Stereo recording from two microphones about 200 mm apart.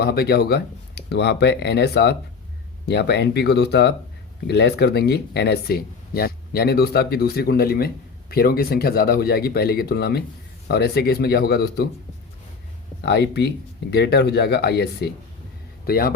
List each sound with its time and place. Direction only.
0.0 s speech: 50° left (ahead or behind)
13.0 s speech: 55° left (ahead or behind)